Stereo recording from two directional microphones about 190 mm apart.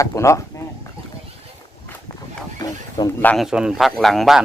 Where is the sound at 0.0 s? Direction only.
15° left (ahead or behind).